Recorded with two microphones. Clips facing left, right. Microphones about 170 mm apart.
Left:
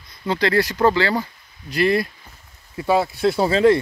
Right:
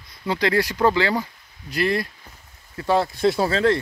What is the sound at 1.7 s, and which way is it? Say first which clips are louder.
Speech: left 4 dB; centre (ahead or behind).